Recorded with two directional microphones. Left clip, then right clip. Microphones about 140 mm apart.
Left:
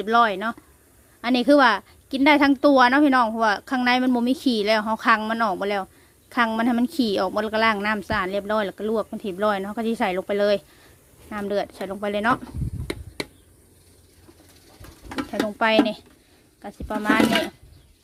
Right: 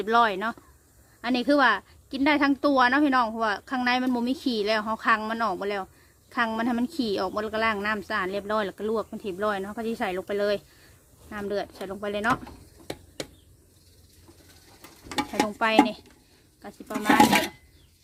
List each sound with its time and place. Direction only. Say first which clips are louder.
0.0 s a woman's voice: left 3 dB; 10° left (ahead or behind)
15.5 s speech: left 3 dB; 20° left (ahead or behind)